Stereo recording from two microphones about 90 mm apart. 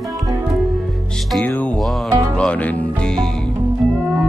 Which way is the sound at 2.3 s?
15° left (ahead or behind).